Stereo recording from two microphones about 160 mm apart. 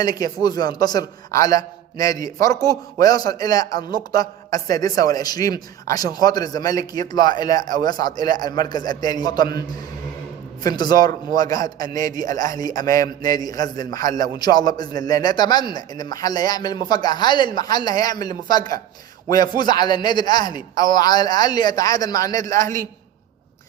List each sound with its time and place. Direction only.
0.0 s a man's voice: 25° left (ahead or behind)